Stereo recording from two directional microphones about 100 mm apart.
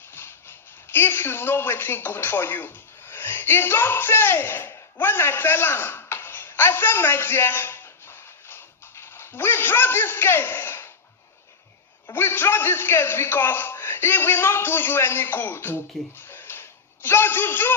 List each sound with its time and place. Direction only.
0.1 s speech: 25° left (ahead or behind)
12.0 s a man's voice: 25° left (ahead or behind)